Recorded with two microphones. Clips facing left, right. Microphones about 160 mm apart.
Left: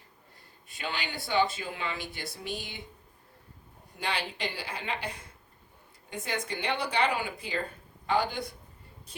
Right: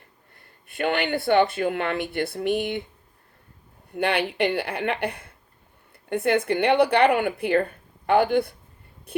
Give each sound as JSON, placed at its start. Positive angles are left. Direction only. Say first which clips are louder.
{"t": 0.3, "sound": "speech", "louder": "right 16 dB", "side_deg": -60}
{"t": 3.9, "sound": "speech", "louder": "right 11 dB", "side_deg": -60}
{"t": 9.1, "sound": "a sound", "louder": "right 17 dB", "side_deg": -60}